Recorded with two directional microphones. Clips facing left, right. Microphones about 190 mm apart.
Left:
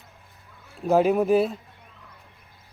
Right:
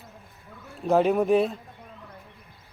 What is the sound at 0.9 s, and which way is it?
Speech, 5° left (ahead or behind).